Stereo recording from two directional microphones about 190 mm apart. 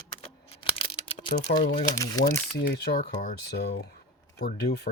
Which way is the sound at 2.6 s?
60° left (ahead or behind).